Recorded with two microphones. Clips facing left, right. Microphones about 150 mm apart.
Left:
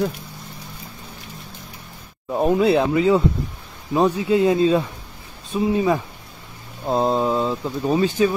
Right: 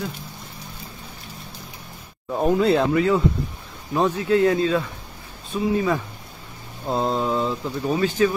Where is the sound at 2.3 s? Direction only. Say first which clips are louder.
Left 2 dB; 15° left (ahead or behind).